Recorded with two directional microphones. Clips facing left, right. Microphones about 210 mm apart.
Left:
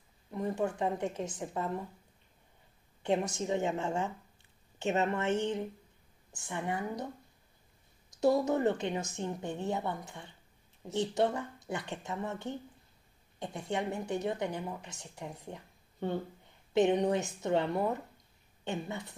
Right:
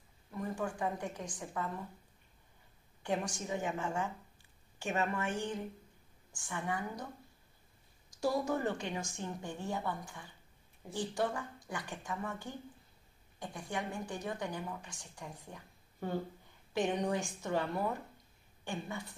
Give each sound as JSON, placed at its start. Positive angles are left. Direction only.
{"t": 0.3, "sound": "a woman's voice", "side_deg": 25}
{"t": 3.0, "sound": "a woman's voice", "side_deg": 25}
{"t": 8.2, "sound": "a woman's voice", "side_deg": 20}